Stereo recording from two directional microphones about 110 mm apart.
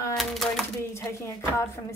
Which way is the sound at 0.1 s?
Centre (ahead or behind).